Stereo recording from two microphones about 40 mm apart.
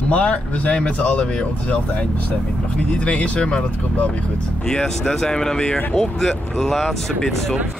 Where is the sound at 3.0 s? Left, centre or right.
Left.